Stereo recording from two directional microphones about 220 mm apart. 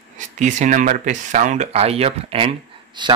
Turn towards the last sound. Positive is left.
turn(degrees=-20)  # may be behind; listen again after turning